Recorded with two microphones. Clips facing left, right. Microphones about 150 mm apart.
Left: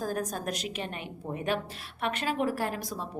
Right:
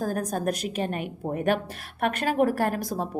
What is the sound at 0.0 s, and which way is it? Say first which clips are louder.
A woman's voice: right 5 dB; 50° right (ahead or behind).